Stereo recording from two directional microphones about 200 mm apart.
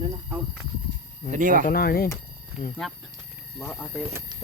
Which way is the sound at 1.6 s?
50° left (ahead or behind).